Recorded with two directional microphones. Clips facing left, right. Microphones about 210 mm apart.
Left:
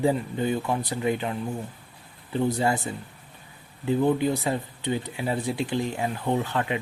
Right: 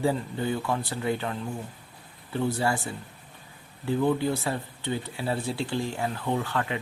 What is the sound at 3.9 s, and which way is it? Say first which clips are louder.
Speech: left 2 dB; 15° left (ahead or behind).